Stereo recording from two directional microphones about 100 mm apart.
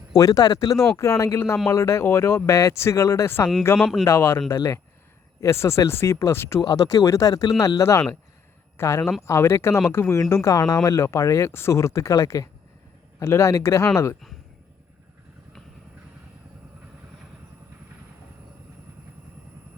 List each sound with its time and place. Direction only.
0.1 s speech: 35° left (ahead or behind)
3.8 s speech: 5° right (ahead or behind)
4.0 s speech: 25° left (ahead or behind)
6.6 s speech: 35° left (ahead or behind)